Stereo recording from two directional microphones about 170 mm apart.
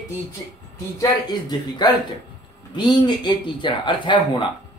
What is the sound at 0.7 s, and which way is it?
Speech, 20° left (ahead or behind).